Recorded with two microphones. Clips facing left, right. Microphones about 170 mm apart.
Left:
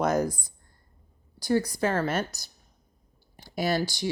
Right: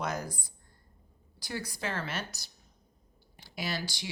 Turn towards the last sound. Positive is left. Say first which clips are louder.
# left 10 dB
turn(degrees=45)  # may be behind; listen again after turning